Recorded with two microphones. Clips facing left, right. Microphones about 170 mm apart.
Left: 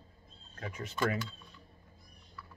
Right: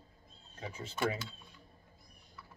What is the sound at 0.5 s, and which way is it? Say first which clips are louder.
Speech: left 2 dB; 10° right (ahead or behind).